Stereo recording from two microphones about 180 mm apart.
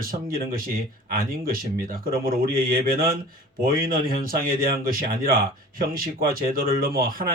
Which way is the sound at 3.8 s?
55° right (ahead or behind).